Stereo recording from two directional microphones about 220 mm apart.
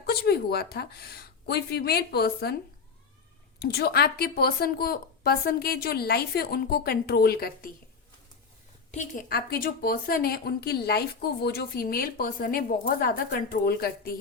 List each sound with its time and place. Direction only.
0.0 s a woman's voice: 45° left (ahead or behind)
3.6 s a woman's voice: 45° left (ahead or behind)
8.9 s a woman's voice: 35° left (ahead or behind)